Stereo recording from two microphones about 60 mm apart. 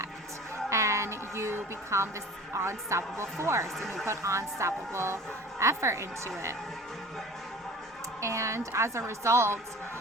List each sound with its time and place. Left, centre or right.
0.7 s a sound: right
2.5 s a woman's voice: right
3.8 s speech: centre
4.0 s a woman's voice: right
8.2 s a woman's voice: right